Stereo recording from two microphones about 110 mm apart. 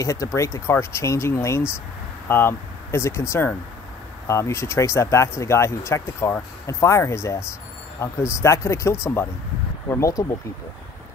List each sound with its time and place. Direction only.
0.0 s speech: 30° left (ahead or behind)